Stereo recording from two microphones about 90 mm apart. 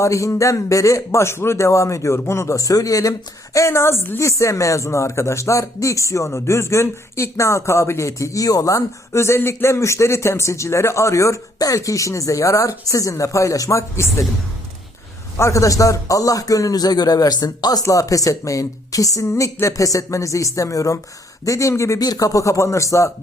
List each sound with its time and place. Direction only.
0.0 s a man's voice: 35° left (ahead or behind)
15.4 s a man's voice: 35° left (ahead or behind)
19.2 s a man's voice: 30° left (ahead or behind)